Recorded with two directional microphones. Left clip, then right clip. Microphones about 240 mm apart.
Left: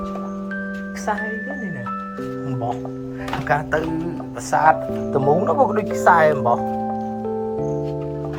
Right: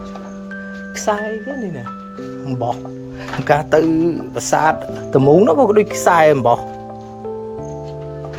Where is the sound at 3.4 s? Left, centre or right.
Right.